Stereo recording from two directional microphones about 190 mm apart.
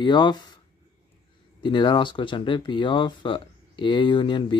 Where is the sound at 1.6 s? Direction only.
25° left (ahead or behind).